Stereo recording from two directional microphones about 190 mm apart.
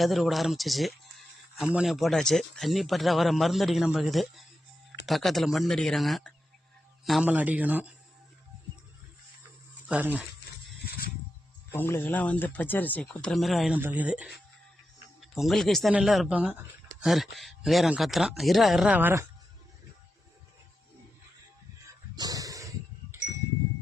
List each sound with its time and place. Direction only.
0.0 s a man's voice: centre (ahead or behind)
9.9 s a man's voice: 10° right (ahead or behind)
10.8 s mechanisms: 55° left (ahead or behind)
11.7 s speech: 10° left (ahead or behind); by 19.3 s 10° right (ahead or behind)
21.8 s a sound: 20° right (ahead or behind)